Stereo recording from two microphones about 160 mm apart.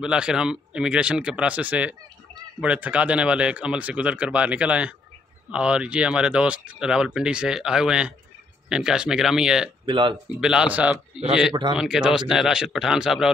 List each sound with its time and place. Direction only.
0.0 s speech: 5° right (ahead or behind)
9.8 s speech: 30° right (ahead or behind)
10.4 s speech: 5° right (ahead or behind)